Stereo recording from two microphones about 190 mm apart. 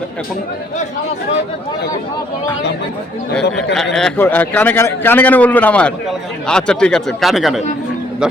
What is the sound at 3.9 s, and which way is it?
A man's voice, 5° left (ahead or behind).